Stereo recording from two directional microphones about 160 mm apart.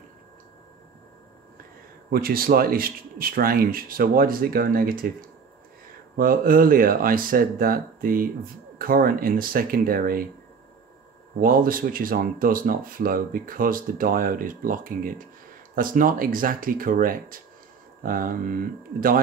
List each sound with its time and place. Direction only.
2.0 s speech: 65° right (ahead or behind)
11.4 s speech: 60° right (ahead or behind)